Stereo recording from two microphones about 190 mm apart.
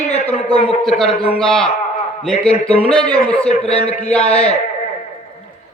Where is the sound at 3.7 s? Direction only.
35° left (ahead or behind).